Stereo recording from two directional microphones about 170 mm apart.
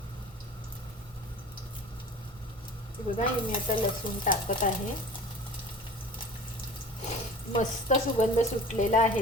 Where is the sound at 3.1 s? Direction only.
30° left (ahead or behind).